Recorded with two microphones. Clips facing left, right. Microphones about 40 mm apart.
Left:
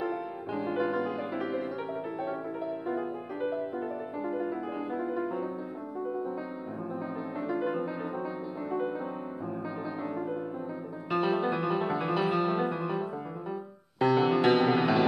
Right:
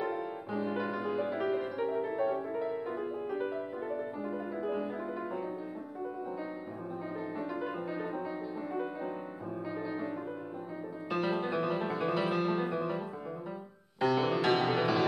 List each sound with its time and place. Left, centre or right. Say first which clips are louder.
0.6 s music: left 5 dB; centre
7.3 s music: left 8 dB; centre
11.1 s music: left 5 dB; left